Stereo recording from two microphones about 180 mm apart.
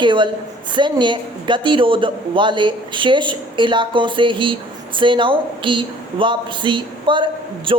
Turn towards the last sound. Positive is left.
turn(degrees=-30)  # may be behind; listen again after turning